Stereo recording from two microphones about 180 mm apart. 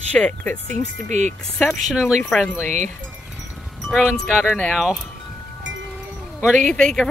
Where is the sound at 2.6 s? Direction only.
40° right (ahead or behind).